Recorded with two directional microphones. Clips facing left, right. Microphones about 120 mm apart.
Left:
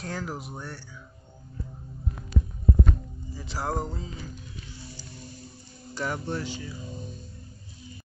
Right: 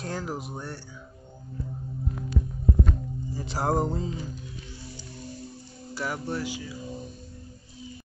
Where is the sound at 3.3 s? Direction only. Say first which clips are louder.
Right 3 dB; 45° right (ahead or behind).